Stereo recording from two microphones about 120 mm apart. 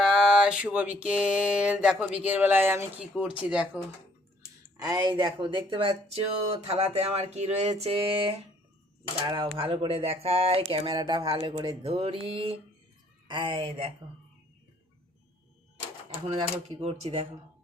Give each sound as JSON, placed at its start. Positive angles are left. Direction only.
{"t": 0.0, "sound": "a sound", "side_deg": 0}
{"t": 2.1, "sound": "speech", "side_deg": -15}
{"t": 4.8, "sound": "speech", "side_deg": -35}
{"t": 6.5, "sound": "a sound", "side_deg": -60}
{"t": 9.3, "sound": "speech", "side_deg": -45}
{"t": 16.4, "sound": "speech", "side_deg": -55}